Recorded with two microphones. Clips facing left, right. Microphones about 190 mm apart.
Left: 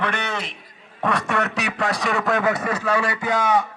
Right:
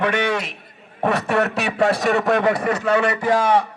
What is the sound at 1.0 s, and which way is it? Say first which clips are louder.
A man's voice: right 4 dB; 35° right (ahead or behind).